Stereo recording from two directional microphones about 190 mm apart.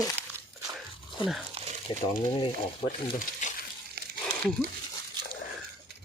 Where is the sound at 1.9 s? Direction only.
25° left (ahead or behind).